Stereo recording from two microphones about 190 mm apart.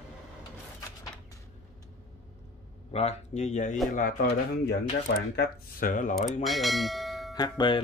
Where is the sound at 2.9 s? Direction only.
35° left (ahead or behind).